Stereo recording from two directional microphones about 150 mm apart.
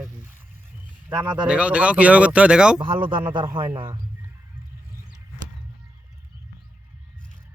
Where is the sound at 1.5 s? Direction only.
10° right (ahead or behind).